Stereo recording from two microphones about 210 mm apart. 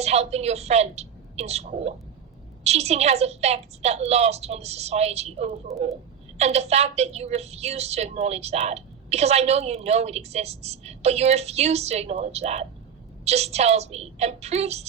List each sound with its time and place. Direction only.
0.0 s a woman's voice: 30° right (ahead or behind)
5.7 s speech: centre (ahead or behind)
6.3 s a woman's voice: 30° right (ahead or behind)